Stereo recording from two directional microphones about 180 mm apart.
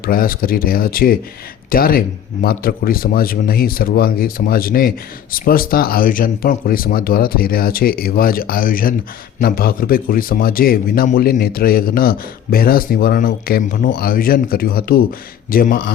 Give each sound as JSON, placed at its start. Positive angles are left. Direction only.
{"t": 0.0, "sound": "a man's voice", "side_deg": 55}